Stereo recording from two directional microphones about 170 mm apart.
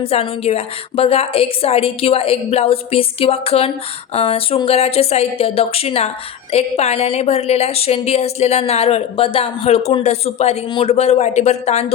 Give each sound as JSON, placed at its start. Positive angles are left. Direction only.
{"t": 0.0, "sound": "a woman's voice", "side_deg": 35}